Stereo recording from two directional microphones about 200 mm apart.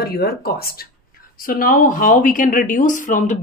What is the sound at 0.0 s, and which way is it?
Speech, 50° left (ahead or behind).